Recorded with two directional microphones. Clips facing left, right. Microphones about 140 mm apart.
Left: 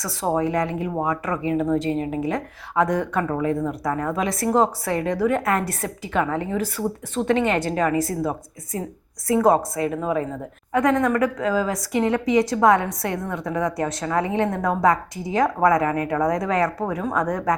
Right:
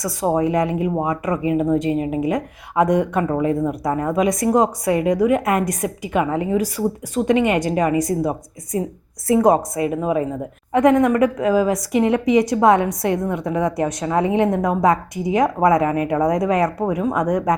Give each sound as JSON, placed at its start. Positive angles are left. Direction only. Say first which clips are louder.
{"t": 0.0, "sound": "a woman's voice", "louder": "right 4 dB", "side_deg": -15}